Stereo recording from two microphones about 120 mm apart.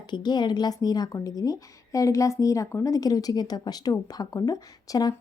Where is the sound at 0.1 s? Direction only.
35° left (ahead or behind).